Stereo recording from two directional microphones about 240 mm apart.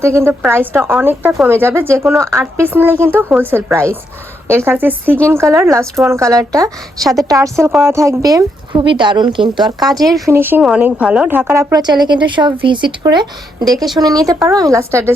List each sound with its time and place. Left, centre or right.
0.0 s speech: centre